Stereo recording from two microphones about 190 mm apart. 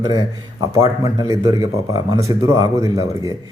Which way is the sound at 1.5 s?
20° right (ahead or behind).